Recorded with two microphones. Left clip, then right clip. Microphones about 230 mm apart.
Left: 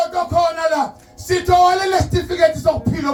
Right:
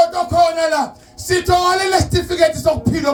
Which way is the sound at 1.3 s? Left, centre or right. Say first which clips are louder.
Left 1 dB; right.